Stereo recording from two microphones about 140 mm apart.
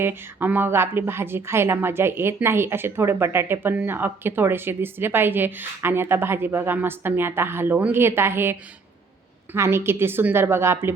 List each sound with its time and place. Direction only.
0.0 s a woman's voice: 15° right (ahead or behind)